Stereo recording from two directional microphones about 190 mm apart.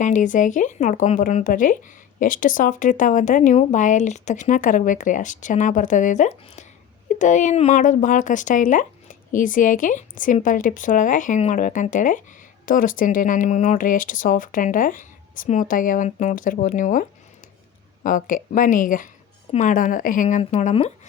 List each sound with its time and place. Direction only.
0.0 s speech: 40° left (ahead or behind)